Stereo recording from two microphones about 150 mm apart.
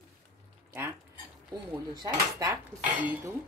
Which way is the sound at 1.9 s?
25° right (ahead or behind).